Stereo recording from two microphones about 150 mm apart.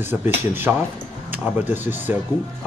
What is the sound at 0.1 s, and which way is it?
Speech, 10° right (ahead or behind).